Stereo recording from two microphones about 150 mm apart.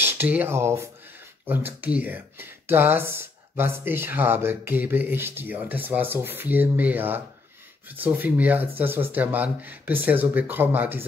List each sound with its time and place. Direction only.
0.0 s speech: 15° right (ahead or behind)